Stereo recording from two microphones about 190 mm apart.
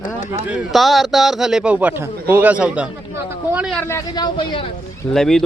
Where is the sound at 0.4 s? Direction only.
5° right (ahead or behind).